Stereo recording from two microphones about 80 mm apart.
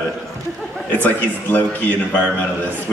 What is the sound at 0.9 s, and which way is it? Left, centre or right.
A man's voice, left.